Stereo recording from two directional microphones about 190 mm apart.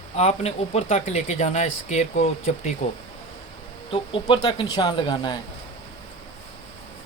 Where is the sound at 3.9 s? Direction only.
25° left (ahead or behind).